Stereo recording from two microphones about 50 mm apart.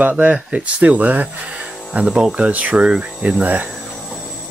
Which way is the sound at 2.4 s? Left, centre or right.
Right.